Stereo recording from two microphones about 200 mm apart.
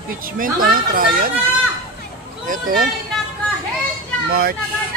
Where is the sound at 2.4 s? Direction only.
40° right (ahead or behind).